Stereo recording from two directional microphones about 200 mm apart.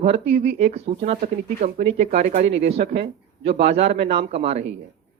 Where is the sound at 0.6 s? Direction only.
30° right (ahead or behind).